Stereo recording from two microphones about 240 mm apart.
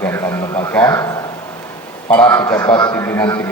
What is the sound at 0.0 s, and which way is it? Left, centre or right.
A man's voice, centre.